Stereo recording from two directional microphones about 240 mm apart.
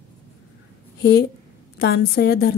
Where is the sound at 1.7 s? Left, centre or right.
Left.